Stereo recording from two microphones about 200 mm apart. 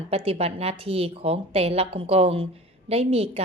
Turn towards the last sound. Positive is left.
turn(degrees=-30)  # may be behind; listen again after turning